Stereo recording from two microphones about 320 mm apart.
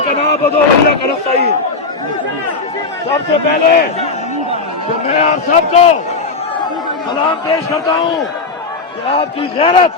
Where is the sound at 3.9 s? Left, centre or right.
Centre.